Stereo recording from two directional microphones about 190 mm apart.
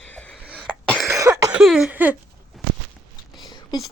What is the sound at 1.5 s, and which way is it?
Cough, 5° right (ahead or behind).